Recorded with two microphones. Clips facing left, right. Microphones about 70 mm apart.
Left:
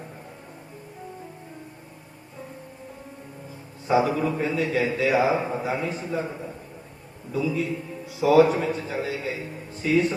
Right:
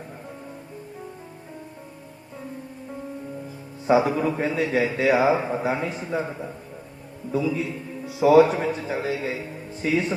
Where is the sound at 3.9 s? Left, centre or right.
Right.